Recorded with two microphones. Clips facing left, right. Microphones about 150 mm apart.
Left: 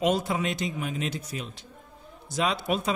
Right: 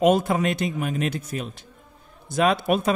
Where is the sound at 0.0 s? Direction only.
50° right (ahead or behind).